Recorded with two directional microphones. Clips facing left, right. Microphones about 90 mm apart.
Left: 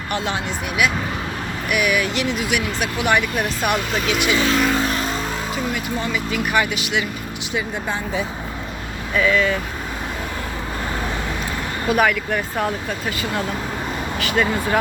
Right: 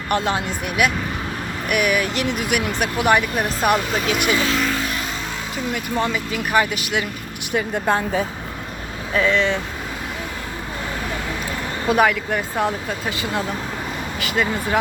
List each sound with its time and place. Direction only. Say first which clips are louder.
0.1 s speech: right 3 dB; 40° right (ahead or behind)
2.2 s speech: even; 55° right (ahead or behind)
4.4 s speech: left 3 dB; centre (ahead or behind)
4.8 s music: left 4 dB; 35° left (ahead or behind)
5.7 s speech: right 2 dB; 40° right (ahead or behind)
9.1 s speech: even; 30° right (ahead or behind)
11.9 s speech: right 1 dB; 25° right (ahead or behind)
14.2 s speech: left 2 dB; 10° right (ahead or behind)